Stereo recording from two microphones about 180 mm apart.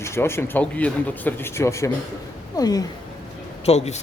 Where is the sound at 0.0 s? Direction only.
15° left (ahead or behind).